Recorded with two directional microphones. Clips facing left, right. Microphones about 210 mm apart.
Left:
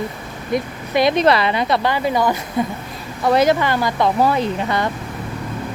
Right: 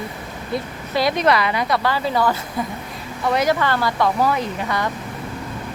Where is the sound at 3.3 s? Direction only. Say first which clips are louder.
Left 4 dB; 30° left (ahead or behind).